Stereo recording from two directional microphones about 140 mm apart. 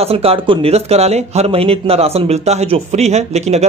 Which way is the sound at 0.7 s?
50° right (ahead or behind).